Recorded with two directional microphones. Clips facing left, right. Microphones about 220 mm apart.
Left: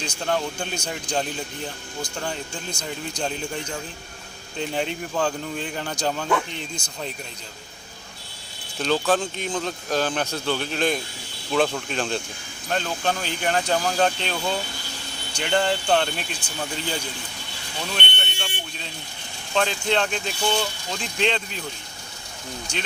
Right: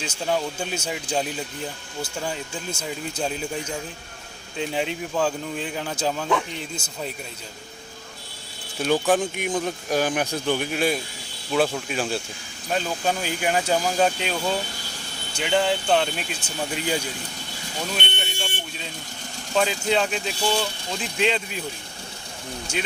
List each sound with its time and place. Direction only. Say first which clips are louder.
0.0 s speech: even; 5° right (ahead or behind)
8.8 s speech: right 1 dB; 15° right (ahead or behind)
17.9 s alarm: right 2 dB; 10° right (ahead or behind)
19.5 s speech: right 1 dB; 5° right (ahead or behind)